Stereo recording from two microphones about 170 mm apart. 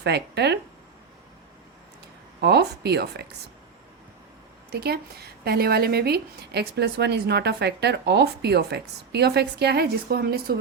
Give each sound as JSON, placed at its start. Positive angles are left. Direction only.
{"t": 0.0, "sound": "a woman's voice", "side_deg": -75}
{"t": 2.4, "sound": "a woman's voice", "side_deg": -75}
{"t": 4.7, "sound": "a woman's voice", "side_deg": -70}